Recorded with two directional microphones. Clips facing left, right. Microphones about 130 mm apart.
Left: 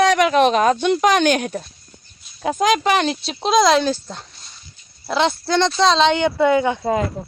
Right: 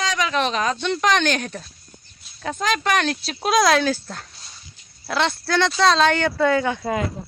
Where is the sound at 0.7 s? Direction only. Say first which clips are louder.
Left 4 dB; 10° left (ahead or behind).